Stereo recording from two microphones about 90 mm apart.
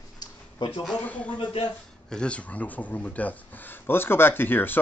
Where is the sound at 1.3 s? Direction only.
70° left (ahead or behind).